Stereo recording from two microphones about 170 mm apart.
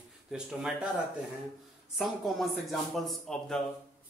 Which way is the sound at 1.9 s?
Centre (ahead or behind).